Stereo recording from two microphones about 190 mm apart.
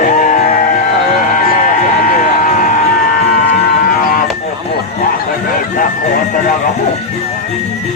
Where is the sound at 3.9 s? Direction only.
45° left (ahead or behind).